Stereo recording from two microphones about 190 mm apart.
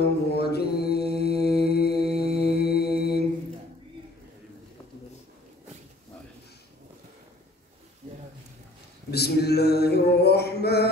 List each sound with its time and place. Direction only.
0.0 s mantra: 60° left (ahead or behind)
8.0 s a sound: 45° right (ahead or behind)
9.1 s mantra: 60° left (ahead or behind)